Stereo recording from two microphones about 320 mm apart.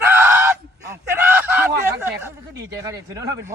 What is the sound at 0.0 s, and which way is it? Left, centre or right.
Honk, centre.